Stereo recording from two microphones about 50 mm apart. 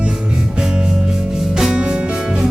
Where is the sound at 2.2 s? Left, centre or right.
Centre.